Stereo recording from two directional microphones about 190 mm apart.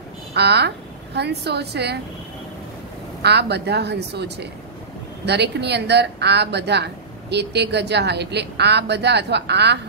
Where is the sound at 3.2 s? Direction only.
60° right (ahead or behind).